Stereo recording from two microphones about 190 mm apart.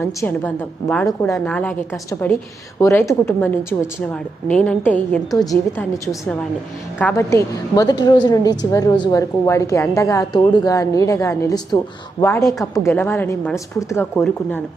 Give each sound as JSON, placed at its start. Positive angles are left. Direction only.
{"t": 0.0, "sound": "a woman's voice", "side_deg": 10}
{"t": 5.3, "sound": "a woman's voice", "side_deg": 20}